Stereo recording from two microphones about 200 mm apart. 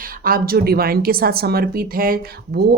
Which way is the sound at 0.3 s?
45° right (ahead or behind).